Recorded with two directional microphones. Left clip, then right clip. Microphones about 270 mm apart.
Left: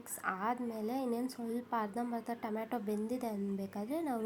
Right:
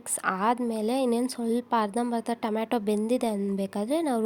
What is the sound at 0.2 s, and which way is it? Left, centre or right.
A woman's voice, right.